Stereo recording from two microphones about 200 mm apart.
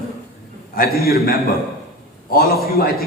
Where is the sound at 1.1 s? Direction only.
50° left (ahead or behind).